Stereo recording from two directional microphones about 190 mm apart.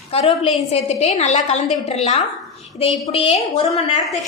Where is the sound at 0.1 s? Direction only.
30° left (ahead or behind).